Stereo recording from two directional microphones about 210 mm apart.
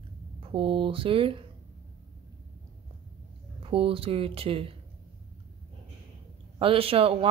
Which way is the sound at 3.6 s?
25° right (ahead or behind).